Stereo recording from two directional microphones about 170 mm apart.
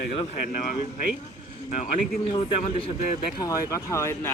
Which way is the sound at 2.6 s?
35° left (ahead or behind).